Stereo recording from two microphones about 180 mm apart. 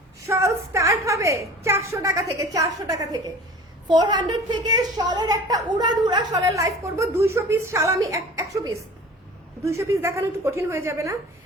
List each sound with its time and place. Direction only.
0.3 s a woman's voice: 15° right (ahead or behind)